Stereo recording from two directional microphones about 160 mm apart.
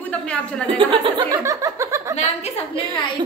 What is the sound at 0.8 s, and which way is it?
Speech, 35° right (ahead or behind).